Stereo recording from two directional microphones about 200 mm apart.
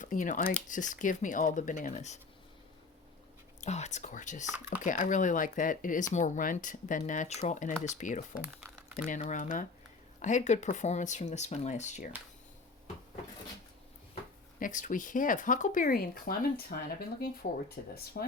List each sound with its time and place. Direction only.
0.0 s speech: 40° left (ahead or behind)
3.6 s speech: 35° left (ahead or behind)
8.4 s crumpling: 5° right (ahead or behind)
9.0 s speech: 40° left (ahead or behind)
14.6 s speech: 40° left (ahead or behind)
17.8 s speech: 40° left (ahead or behind)
18.2 s speech: 55° left (ahead or behind)